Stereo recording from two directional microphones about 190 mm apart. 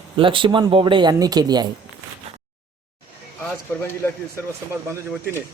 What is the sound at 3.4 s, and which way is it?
A man's voice, 10° left (ahead or behind).